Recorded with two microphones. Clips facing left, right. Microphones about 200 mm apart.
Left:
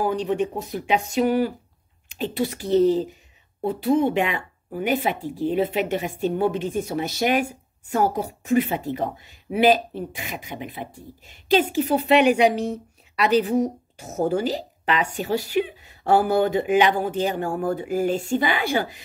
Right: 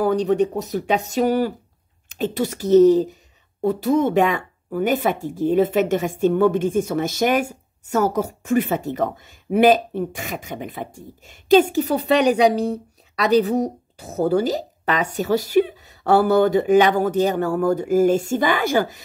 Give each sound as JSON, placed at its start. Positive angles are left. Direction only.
{"t": 0.0, "sound": "a woman's voice", "side_deg": -40}